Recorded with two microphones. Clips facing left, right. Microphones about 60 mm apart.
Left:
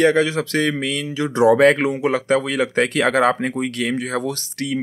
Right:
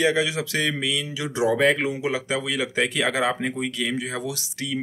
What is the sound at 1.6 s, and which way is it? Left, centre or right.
Speech, left.